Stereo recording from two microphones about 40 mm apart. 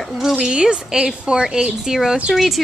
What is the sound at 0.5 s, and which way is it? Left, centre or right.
A woman's voice, right.